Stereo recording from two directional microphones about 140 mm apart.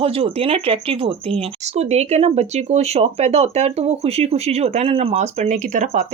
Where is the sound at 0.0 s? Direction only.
45° right (ahead or behind).